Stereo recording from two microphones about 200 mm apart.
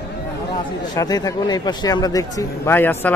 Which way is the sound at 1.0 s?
20° left (ahead or behind).